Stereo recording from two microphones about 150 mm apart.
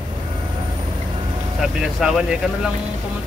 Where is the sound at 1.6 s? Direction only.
Centre (ahead or behind).